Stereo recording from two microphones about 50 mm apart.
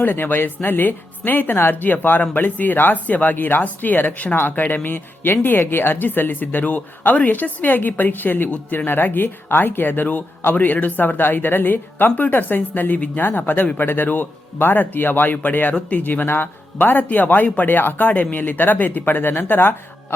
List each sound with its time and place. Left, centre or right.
0.0 s speech: left
16.2 s speech: left